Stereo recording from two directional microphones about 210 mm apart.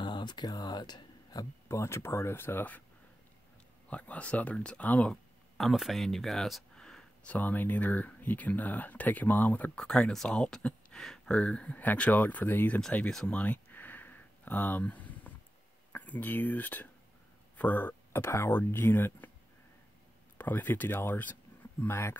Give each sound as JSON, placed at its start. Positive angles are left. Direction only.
{"t": 0.0, "sound": "speech", "side_deg": 20}
{"t": 3.9, "sound": "speech", "side_deg": 5}
{"t": 20.3, "sound": "speech", "side_deg": 10}